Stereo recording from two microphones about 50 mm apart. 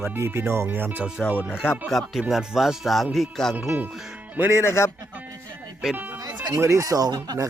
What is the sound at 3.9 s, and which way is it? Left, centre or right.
Speech, centre.